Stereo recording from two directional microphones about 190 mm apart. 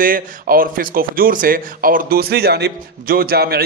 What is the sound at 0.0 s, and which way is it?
Speech, 50° right (ahead or behind).